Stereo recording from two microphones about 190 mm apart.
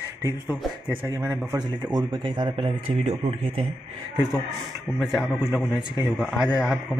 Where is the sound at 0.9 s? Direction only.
10° right (ahead or behind); by 3.1 s 30° right (ahead or behind).